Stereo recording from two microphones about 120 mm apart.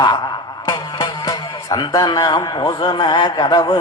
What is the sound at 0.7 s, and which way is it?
Music, 30° left (ahead or behind).